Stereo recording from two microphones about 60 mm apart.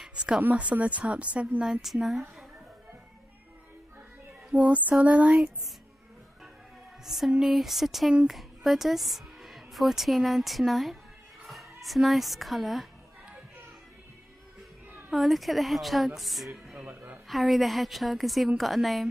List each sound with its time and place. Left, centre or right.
0.4 s a woman's voice: right
1.6 s a woman's voice: centre
4.5 s a woman's voice: right
7.1 s a woman's voice: centre
15.0 s a woman's voice: centre
16.8 s a woman's voice: right
17.3 s a woman's voice: centre